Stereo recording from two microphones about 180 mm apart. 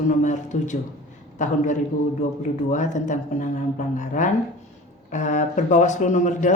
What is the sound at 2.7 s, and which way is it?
Speech, 40° left (ahead or behind).